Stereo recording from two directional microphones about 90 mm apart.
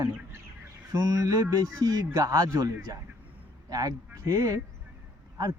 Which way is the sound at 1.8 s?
45° right (ahead or behind).